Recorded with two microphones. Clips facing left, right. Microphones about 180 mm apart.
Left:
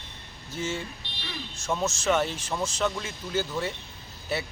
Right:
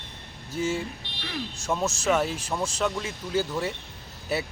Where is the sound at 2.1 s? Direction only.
Centre (ahead or behind).